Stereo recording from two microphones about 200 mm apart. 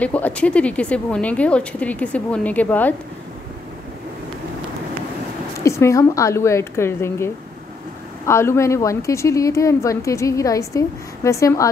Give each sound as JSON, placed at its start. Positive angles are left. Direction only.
{"t": 0.0, "sound": "a woman's voice", "side_deg": 5}
{"t": 5.6, "sound": "a woman's voice", "side_deg": 15}
{"t": 8.3, "sound": "a woman's voice", "side_deg": 15}